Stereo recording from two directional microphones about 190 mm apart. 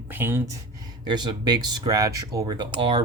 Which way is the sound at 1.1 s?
25° right (ahead or behind).